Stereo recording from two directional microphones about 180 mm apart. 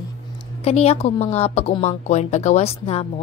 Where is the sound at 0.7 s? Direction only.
35° left (ahead or behind).